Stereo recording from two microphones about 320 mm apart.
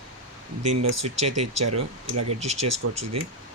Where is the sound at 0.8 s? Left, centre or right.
Right.